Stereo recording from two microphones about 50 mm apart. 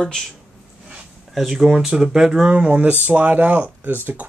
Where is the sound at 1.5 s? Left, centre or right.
Centre; by 4.2 s right.